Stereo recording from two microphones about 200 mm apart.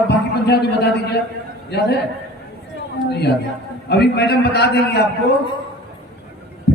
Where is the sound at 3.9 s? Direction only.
55° left (ahead or behind).